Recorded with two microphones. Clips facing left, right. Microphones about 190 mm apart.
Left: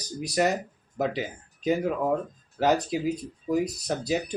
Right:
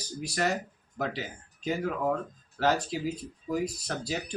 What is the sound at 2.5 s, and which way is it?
Speech, 15° left (ahead or behind).